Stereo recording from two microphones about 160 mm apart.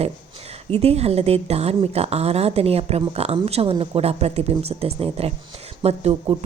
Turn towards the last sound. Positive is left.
turn(degrees=-40)  # may be behind; listen again after turning